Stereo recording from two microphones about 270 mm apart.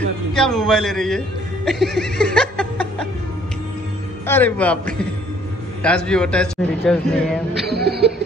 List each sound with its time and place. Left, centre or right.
0.3 s a man's voice: centre
1.7 s laughter: centre
4.3 s a man's voice: centre
7.6 s a sound: right